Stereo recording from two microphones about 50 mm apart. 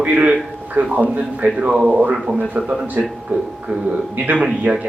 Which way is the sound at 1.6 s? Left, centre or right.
Right.